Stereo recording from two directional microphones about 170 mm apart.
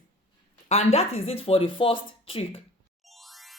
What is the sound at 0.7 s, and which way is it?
Speech, 40° left (ahead or behind).